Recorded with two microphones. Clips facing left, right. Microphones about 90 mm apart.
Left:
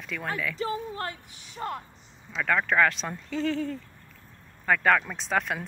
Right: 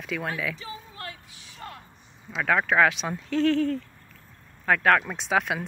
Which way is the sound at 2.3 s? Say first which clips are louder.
Right 2 dB; 5° right (ahead or behind).